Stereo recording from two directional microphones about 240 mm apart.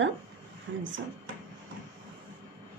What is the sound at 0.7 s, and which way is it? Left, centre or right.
Speech, right.